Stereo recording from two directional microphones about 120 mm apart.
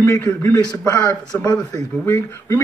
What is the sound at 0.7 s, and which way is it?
Speech, 35° left (ahead or behind).